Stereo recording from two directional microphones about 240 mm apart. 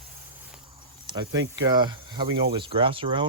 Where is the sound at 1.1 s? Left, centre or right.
Centre.